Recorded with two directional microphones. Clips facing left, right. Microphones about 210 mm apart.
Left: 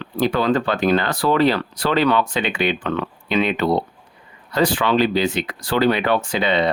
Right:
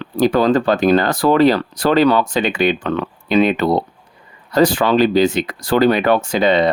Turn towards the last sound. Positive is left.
turn(degrees=-40)  # may be behind; listen again after turning